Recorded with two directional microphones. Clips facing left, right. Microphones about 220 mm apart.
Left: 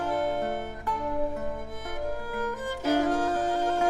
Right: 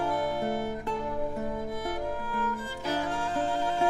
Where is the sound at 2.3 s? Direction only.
45° left (ahead or behind).